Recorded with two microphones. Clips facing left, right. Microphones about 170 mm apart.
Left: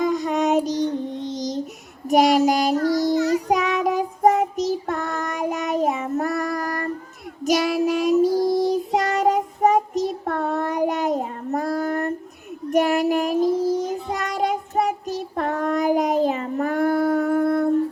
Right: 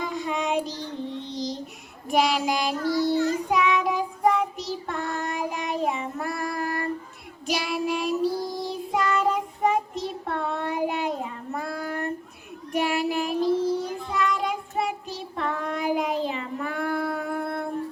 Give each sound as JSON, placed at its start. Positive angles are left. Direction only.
{"t": 0.0, "sound": "child singing", "side_deg": 40}